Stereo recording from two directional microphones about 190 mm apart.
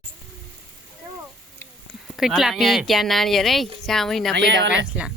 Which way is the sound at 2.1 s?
Centre (ahead or behind).